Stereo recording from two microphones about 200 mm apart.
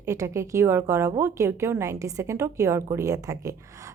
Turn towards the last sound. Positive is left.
turn(degrees=-15)  # may be behind; listen again after turning